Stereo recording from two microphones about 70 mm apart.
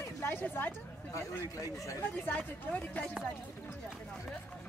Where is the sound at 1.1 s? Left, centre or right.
Left.